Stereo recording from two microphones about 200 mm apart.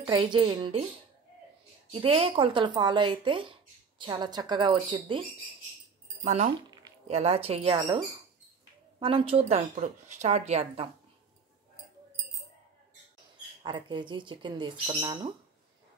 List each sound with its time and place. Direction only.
0.0 s speech: 25° right (ahead or behind)
1.9 s speech: 25° right (ahead or behind)
6.2 s a woman's voice: 35° right (ahead or behind)
9.0 s a woman's voice: 30° right (ahead or behind)
13.6 s speech: 25° right (ahead or behind)